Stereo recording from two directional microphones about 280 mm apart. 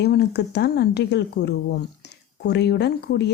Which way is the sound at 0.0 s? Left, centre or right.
Left.